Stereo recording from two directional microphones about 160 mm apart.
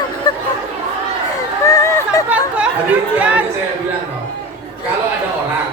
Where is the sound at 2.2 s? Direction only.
10° right (ahead or behind).